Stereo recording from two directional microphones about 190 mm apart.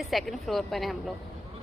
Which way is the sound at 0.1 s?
Centre (ahead or behind).